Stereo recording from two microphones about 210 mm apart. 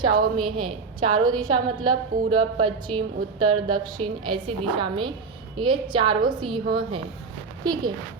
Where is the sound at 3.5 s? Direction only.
90° right.